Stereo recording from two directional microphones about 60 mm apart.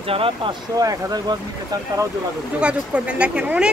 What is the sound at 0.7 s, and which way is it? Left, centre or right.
Speech, right.